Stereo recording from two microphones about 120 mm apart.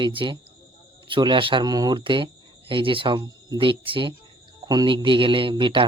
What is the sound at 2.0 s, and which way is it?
Speech, 45° right (ahead or behind).